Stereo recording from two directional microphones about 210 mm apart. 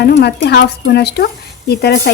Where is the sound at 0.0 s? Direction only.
50° left (ahead or behind).